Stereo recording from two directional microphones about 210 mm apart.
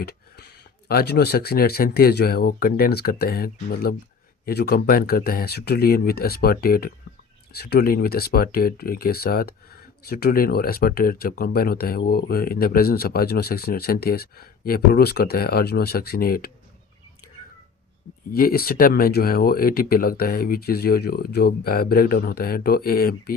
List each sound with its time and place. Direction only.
0.0 s speech: 50° left (ahead or behind)
18.3 s speech: 45° left (ahead or behind)